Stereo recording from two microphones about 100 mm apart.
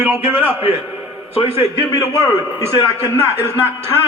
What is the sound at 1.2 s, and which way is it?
Speech, 75° left (ahead or behind).